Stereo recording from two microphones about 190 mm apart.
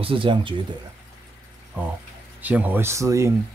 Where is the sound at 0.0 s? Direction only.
25° right (ahead or behind).